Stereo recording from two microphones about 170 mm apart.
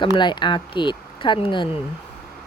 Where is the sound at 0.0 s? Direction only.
25° left (ahead or behind).